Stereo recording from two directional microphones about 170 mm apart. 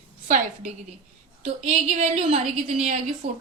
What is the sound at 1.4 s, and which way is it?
A woman's voice, 45° right (ahead or behind).